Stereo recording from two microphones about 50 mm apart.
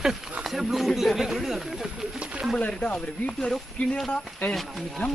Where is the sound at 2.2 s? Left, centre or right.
Centre.